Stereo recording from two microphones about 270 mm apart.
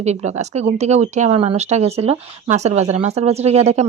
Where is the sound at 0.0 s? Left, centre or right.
Right.